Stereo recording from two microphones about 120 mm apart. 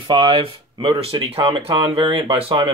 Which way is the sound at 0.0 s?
45° right (ahead or behind).